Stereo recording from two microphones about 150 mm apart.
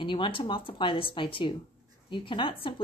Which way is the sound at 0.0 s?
35° left (ahead or behind).